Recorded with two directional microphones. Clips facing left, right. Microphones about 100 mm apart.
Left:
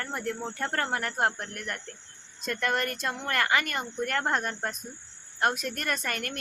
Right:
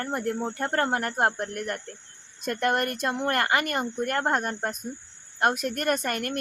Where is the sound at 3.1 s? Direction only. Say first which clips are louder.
Right 2 dB; 35° right (ahead or behind).